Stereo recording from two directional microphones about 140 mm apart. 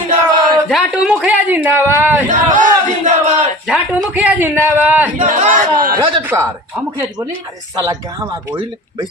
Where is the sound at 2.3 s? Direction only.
65° right (ahead or behind).